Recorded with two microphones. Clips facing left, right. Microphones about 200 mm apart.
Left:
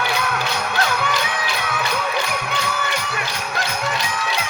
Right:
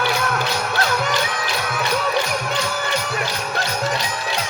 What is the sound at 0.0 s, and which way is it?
Music, 45° right (ahead or behind).